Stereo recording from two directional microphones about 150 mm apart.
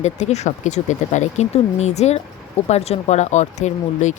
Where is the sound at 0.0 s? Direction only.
50° left (ahead or behind).